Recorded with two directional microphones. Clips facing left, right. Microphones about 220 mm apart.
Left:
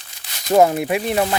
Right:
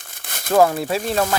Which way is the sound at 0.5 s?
20° left (ahead or behind).